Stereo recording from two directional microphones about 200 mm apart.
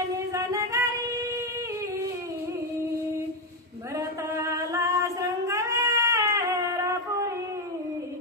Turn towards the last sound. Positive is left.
turn(degrees=-15)  # may be behind; listen again after turning